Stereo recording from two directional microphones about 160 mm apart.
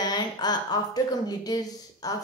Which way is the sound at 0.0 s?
25° left (ahead or behind).